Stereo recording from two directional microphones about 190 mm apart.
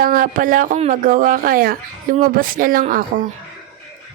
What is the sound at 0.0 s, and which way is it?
Speech, 45° right (ahead or behind).